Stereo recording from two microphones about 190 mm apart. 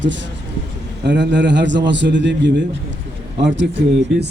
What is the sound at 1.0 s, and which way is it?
A man's voice, 65° right (ahead or behind).